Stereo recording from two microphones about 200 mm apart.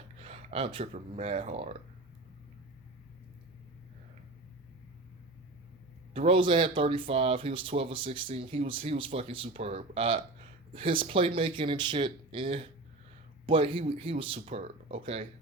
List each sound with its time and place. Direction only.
0.2 s speech: 30° right (ahead or behind)
6.1 s speech: 25° right (ahead or behind)